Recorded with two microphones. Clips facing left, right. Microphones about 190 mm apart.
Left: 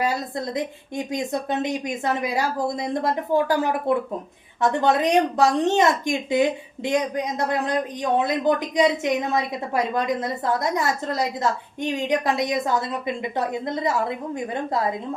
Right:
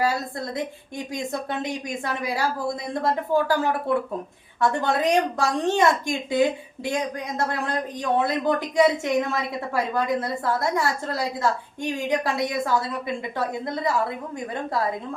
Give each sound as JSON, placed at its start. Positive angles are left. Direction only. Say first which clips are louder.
{"t": 0.0, "sound": "a woman's voice", "louder": "even", "side_deg": 20}